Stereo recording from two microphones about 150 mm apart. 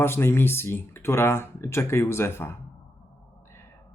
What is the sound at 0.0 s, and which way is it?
Speech, 15° left (ahead or behind).